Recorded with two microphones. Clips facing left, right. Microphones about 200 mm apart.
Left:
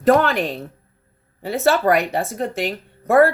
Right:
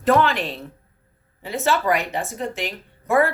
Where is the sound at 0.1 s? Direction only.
45° left (ahead or behind).